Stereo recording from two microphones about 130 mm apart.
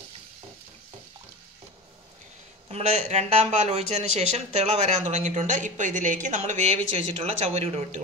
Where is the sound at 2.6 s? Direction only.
55° right (ahead or behind).